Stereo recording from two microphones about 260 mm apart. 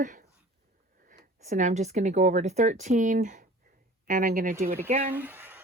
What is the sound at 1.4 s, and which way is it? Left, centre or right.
A woman's voice, right.